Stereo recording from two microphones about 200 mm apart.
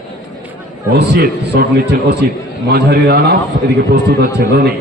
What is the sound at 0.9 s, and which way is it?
Speech, 55° right (ahead or behind).